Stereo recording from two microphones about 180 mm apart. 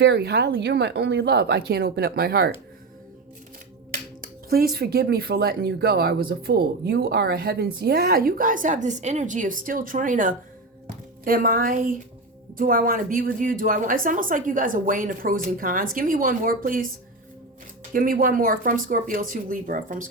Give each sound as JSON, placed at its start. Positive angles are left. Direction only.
{"t": 0.0, "sound": "speech", "side_deg": -70}
{"t": 4.2, "sound": "a woman's voice", "side_deg": -60}
{"t": 17.9, "sound": "a woman's voice", "side_deg": -50}